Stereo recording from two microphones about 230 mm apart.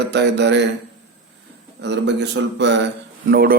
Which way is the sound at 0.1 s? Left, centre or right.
Right.